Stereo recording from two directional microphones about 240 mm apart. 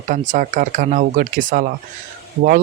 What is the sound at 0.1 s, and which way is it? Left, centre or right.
Speech, right.